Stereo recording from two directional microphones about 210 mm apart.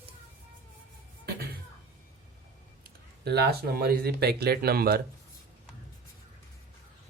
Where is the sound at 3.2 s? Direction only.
50° right (ahead or behind).